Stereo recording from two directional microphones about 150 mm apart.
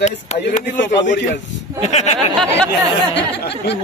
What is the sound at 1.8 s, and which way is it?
Speech, 50° left (ahead or behind).